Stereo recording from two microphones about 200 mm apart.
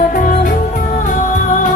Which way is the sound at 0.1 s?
45° left (ahead or behind).